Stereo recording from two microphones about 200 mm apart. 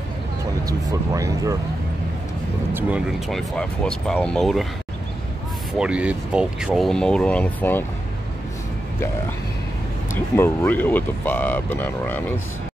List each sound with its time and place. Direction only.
0.7 s speech: 15° right (ahead or behind)
2.7 s speech: 5° right (ahead or behind)
5.8 s speech: 5° right (ahead or behind)
10.1 s speech: 10° left (ahead or behind)